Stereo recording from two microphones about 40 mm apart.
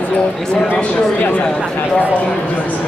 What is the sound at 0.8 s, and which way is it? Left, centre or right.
Speech, left.